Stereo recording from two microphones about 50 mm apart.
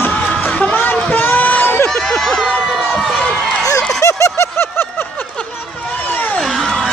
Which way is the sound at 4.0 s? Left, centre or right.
Left.